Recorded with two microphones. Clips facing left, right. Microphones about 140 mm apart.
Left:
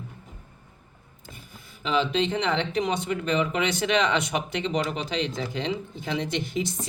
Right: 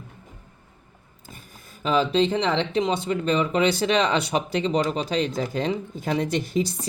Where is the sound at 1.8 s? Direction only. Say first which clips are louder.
Right 4 dB; 40° right (ahead or behind).